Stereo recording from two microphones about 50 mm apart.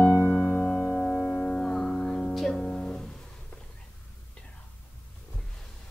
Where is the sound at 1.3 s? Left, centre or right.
Centre.